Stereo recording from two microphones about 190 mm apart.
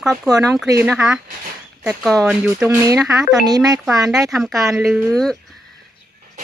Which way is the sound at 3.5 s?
20° right (ahead or behind).